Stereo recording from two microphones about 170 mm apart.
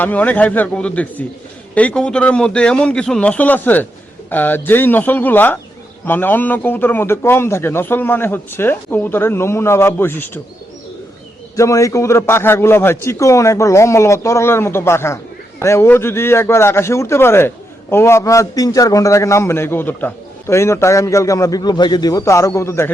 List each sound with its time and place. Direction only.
0.0 s a man's voice: 10° left (ahead or behind)
11.5 s a man's voice: 20° left (ahead or behind)